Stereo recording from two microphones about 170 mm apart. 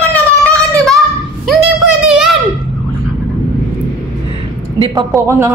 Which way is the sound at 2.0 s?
5° right (ahead or behind).